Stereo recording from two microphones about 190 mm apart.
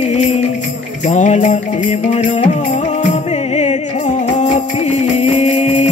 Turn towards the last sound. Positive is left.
turn(degrees=35)  # may be behind; listen again after turning